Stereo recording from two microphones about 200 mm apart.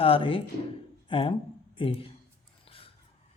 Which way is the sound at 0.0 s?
25° left (ahead or behind).